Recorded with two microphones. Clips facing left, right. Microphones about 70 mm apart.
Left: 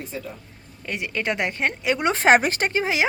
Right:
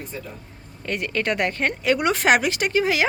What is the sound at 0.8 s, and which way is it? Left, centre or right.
A woman's voice, centre.